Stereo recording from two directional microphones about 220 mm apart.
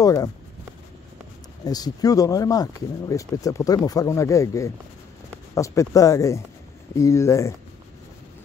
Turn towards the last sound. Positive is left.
turn(degrees=15)  # may be behind; listen again after turning